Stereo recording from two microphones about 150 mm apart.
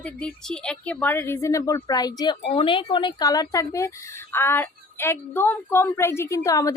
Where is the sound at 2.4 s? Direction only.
35° left (ahead or behind).